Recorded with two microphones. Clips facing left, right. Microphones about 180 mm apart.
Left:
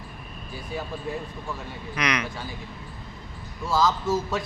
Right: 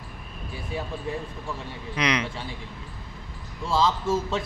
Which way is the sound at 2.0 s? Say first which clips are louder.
Right 2 dB; 25° right (ahead or behind).